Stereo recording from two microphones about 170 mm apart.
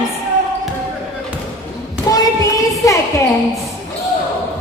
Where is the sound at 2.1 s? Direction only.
20° left (ahead or behind).